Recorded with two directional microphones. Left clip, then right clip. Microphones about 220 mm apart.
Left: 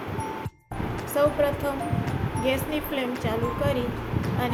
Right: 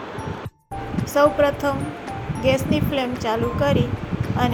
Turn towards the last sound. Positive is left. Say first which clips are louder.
# right 5 dB
turn(degrees=-20)  # may be behind; listen again after turning